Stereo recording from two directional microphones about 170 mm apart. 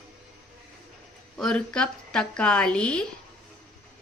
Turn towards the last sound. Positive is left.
turn(degrees=5)  # may be behind; listen again after turning